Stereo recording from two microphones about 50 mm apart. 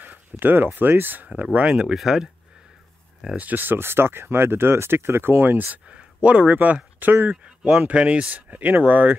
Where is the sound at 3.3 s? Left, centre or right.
Right.